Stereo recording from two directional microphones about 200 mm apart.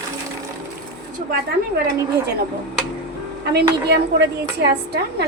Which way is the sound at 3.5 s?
55° right (ahead or behind).